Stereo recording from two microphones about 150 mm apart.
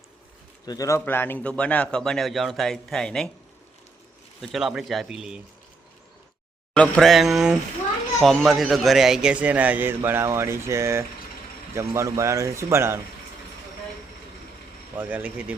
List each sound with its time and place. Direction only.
0.6 s a man's voice: 25° left (ahead or behind); by 3.2 s 5° left (ahead or behind)
4.4 s speech: centre (ahead or behind)
6.7 s a man's voice: 5° left (ahead or behind); by 13.0 s 15° right (ahead or behind)
14.9 s a man's voice: 10° right (ahead or behind)